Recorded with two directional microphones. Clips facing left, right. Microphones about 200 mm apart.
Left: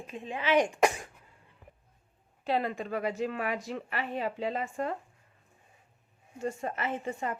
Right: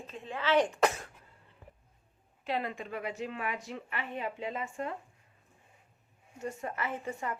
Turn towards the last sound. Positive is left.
turn(degrees=25)  # may be behind; listen again after turning